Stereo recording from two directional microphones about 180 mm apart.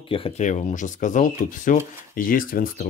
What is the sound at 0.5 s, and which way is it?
Speech, 40° left (ahead or behind).